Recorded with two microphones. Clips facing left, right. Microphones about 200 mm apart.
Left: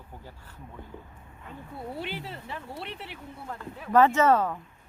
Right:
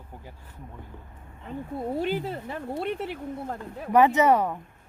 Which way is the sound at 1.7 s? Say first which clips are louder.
Right 8 dB; 45° right (ahead or behind).